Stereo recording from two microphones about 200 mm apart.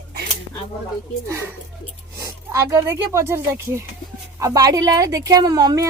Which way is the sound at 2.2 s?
15° right (ahead or behind).